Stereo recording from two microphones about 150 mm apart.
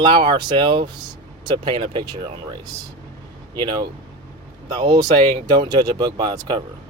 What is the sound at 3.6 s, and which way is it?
Speech, 30° right (ahead or behind).